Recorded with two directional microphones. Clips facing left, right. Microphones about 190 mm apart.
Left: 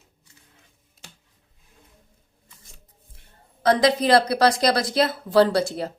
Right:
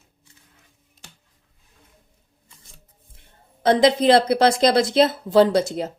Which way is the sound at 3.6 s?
25° right (ahead or behind).